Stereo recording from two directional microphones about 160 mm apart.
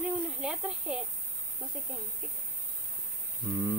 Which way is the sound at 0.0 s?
5° right (ahead or behind).